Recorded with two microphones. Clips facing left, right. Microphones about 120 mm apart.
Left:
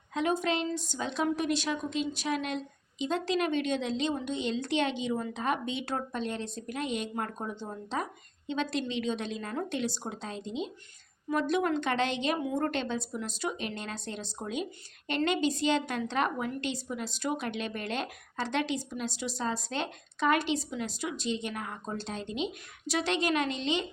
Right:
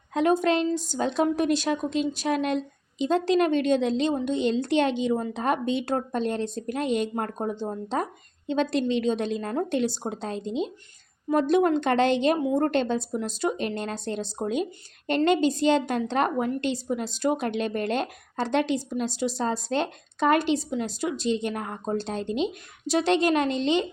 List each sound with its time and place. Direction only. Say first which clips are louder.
0.1 s a woman's voice: right 7 dB; 45° right (ahead or behind)